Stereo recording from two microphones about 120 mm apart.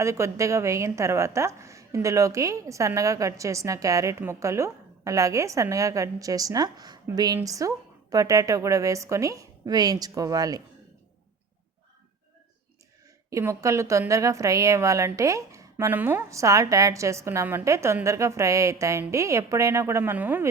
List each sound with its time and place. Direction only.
0.0 s a woman's voice: 25° right (ahead or behind)
13.3 s a woman's voice: 25° right (ahead or behind)